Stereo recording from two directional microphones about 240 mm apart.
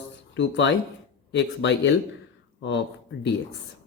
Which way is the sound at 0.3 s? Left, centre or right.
Left.